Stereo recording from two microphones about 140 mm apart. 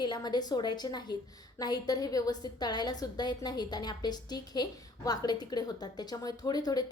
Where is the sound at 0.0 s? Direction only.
30° left (ahead or behind).